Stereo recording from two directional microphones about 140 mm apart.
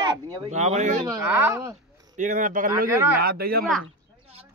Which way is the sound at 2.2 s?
65° right (ahead or behind).